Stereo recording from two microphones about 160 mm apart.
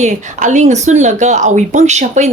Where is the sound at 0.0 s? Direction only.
50° right (ahead or behind).